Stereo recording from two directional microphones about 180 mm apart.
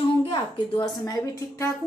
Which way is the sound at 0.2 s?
25° left (ahead or behind).